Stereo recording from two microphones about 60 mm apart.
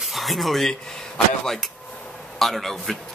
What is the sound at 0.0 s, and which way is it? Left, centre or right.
A man's voice, centre.